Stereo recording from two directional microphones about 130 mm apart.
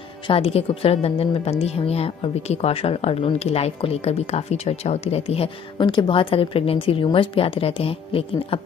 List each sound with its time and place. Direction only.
0.3 s a woman's voice: 50° left (ahead or behind)